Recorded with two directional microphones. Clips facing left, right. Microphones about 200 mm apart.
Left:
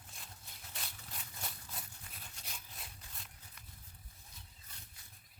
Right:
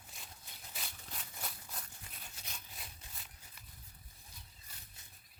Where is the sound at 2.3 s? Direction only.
Centre (ahead or behind).